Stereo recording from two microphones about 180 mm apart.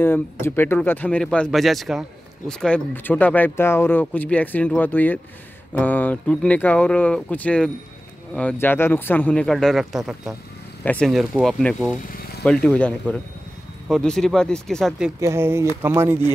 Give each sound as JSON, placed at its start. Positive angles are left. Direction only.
{"t": 0.0, "sound": "speech", "side_deg": 10}
{"t": 12.1, "sound": "a sound", "side_deg": 55}
{"t": 12.4, "sound": "speech", "side_deg": 5}
{"t": 15.1, "sound": "speech", "side_deg": -15}